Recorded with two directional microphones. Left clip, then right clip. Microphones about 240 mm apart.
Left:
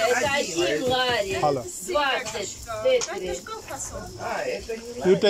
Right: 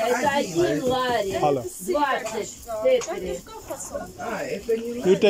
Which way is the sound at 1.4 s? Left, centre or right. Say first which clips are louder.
Right 1 dB; centre.